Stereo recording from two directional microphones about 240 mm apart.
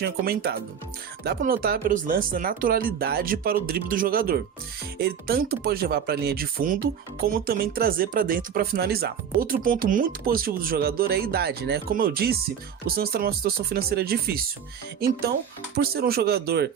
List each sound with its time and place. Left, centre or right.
0.0 s speech: right